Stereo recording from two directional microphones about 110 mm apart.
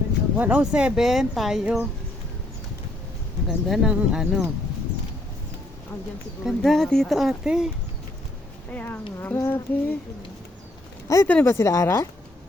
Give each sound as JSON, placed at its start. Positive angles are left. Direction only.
{"t": 0.3, "sound": "speech", "side_deg": -15}
{"t": 3.4, "sound": "speech", "side_deg": -5}
{"t": 6.4, "sound": "speech", "side_deg": 0}
{"t": 8.7, "sound": "speech", "side_deg": 15}
{"t": 9.2, "sound": "a sound", "side_deg": 20}
{"t": 11.1, "sound": "a sound", "side_deg": 30}